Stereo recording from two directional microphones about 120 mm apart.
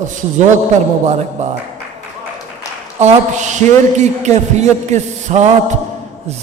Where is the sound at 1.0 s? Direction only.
70° right (ahead or behind).